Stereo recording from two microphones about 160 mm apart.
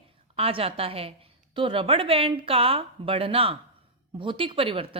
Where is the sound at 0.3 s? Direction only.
35° right (ahead or behind).